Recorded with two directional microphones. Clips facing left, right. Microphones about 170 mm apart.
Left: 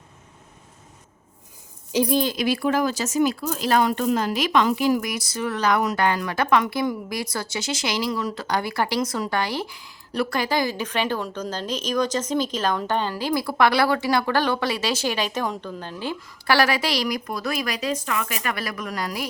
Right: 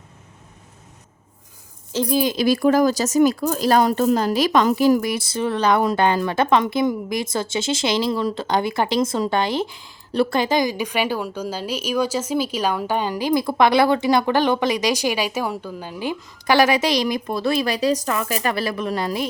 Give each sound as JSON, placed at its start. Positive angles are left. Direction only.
{"t": 1.9, "sound": "speech", "side_deg": 15}
{"t": 2.3, "sound": "a woman's voice", "side_deg": -35}